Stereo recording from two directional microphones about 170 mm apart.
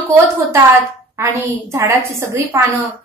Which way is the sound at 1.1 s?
15° right (ahead or behind).